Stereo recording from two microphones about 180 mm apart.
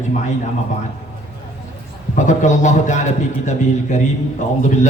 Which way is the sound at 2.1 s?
45° left (ahead or behind).